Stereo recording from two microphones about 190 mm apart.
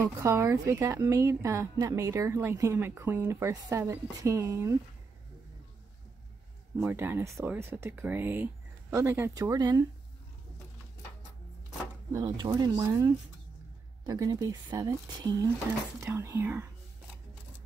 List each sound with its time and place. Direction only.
0.0 s a woman's voice: 15° right (ahead or behind)
6.8 s a woman's voice: 10° right (ahead or behind)
12.1 s a woman's voice: 20° right (ahead or behind)